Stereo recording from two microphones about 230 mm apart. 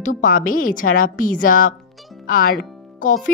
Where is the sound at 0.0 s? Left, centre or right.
Left.